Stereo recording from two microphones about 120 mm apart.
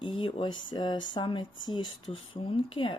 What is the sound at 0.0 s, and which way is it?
Speech, 45° left (ahead or behind).